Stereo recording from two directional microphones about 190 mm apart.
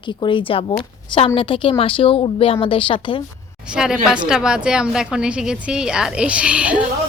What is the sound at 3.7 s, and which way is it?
A woman's voice, 5° right (ahead or behind).